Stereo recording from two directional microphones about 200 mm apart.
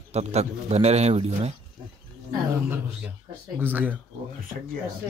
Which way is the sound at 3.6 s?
10° right (ahead or behind).